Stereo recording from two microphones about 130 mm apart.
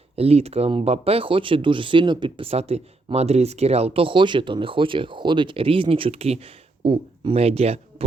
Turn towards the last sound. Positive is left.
turn(degrees=-50)  # may be behind; listen again after turning